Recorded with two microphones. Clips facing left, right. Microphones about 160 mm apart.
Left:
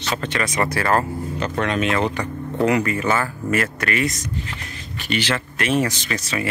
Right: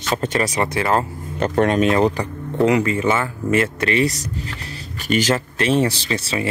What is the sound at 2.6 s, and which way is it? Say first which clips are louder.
Speech: right 2 dB; 20° right (ahead or behind).